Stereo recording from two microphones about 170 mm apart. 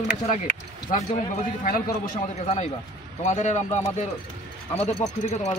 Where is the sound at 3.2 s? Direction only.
45° left (ahead or behind).